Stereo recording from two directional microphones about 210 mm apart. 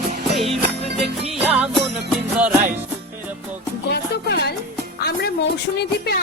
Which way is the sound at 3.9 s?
50° left (ahead or behind).